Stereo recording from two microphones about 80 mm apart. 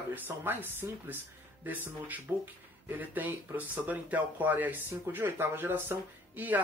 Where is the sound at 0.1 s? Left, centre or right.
Right.